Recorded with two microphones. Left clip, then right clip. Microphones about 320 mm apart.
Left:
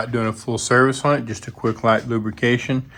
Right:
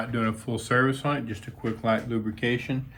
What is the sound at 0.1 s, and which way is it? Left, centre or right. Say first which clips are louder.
Speech: left 6 dB; centre.